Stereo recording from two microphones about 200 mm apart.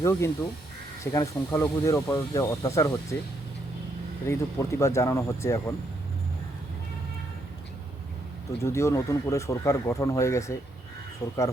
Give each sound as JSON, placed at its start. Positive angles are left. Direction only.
{"t": 0.0, "sound": "speech", "side_deg": 15}
{"t": 4.3, "sound": "speech", "side_deg": 15}
{"t": 8.6, "sound": "speech", "side_deg": 15}